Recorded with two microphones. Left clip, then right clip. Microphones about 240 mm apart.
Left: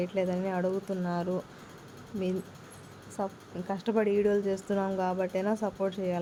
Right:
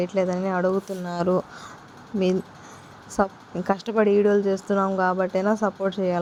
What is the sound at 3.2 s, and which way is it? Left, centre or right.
A woman's voice, centre.